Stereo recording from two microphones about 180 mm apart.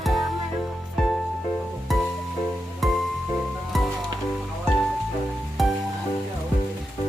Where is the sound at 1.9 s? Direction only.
Centre (ahead or behind).